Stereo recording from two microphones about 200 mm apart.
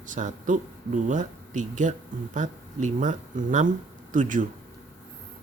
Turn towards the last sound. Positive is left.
turn(degrees=-40)  # may be behind; listen again after turning